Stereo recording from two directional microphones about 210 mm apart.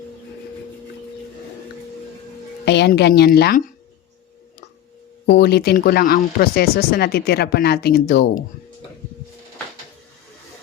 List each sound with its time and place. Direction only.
2.6 s speech: 55° left (ahead or behind)
5.2 s speech: 50° left (ahead or behind)